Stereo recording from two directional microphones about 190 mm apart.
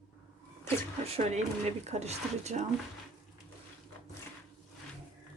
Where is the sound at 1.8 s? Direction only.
35° right (ahead or behind).